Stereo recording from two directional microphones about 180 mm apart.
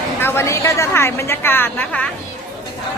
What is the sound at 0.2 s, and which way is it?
A woman's voice, 15° left (ahead or behind).